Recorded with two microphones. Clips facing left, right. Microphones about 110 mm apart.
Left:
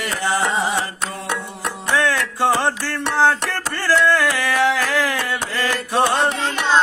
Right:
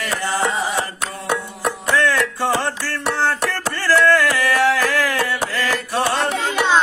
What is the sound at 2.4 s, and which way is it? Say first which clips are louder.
Music: left 2 dB; 15° left (ahead or behind).